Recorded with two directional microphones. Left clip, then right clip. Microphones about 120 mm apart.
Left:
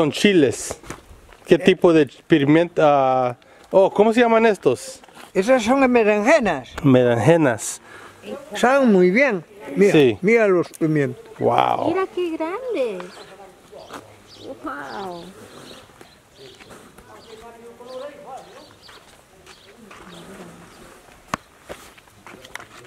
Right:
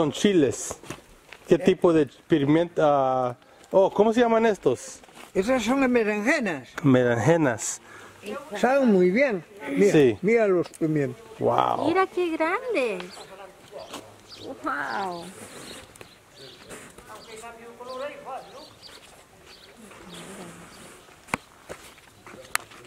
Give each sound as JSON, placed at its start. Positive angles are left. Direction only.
{"t": 0.0, "sound": "a man's voice", "side_deg": 15}
{"t": 5.3, "sound": "speech", "side_deg": 40}
{"t": 6.7, "sound": "a man's voice", "side_deg": 5}
{"t": 8.5, "sound": "speech", "side_deg": 45}
{"t": 11.4, "sound": "a man's voice", "side_deg": 10}
{"t": 11.9, "sound": "speech", "side_deg": -35}
{"t": 13.8, "sound": "wild animals", "side_deg": 0}
{"t": 14.6, "sound": "speech", "side_deg": -55}